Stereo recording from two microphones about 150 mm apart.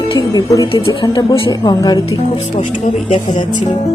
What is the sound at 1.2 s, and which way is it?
Speech, 35° left (ahead or behind).